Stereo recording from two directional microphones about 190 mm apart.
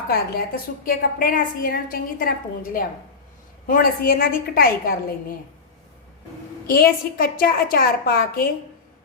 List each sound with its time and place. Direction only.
0.1 s a woman's voice: 50° left (ahead or behind)
3.7 s a woman's voice: 50° left (ahead or behind)
6.7 s a woman's voice: 50° left (ahead or behind)